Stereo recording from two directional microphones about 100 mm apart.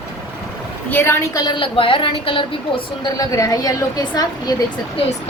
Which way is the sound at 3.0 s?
35° left (ahead or behind).